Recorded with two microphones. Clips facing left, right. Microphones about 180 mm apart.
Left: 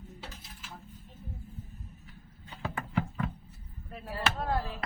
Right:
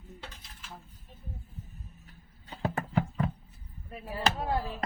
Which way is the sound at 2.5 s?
40° right (ahead or behind).